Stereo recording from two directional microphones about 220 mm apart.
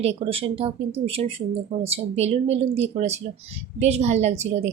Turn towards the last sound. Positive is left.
turn(degrees=-30)  # may be behind; listen again after turning